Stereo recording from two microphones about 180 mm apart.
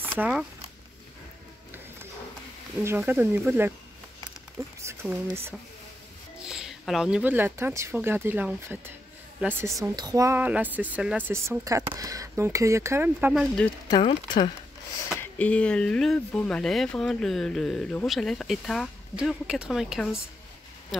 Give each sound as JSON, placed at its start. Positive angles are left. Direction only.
{"t": 0.2, "sound": "speech", "side_deg": -5}
{"t": 3.0, "sound": "speech", "side_deg": -10}
{"t": 5.0, "sound": "speech", "side_deg": -10}
{"t": 6.4, "sound": "speech", "side_deg": -5}
{"t": 13.8, "sound": "speech", "side_deg": 25}
{"t": 15.1, "sound": "speech", "side_deg": 5}